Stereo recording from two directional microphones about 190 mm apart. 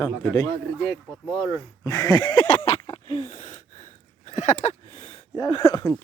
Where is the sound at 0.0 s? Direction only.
20° left (ahead or behind).